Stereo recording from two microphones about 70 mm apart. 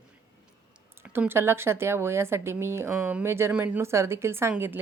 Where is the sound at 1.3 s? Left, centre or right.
Right.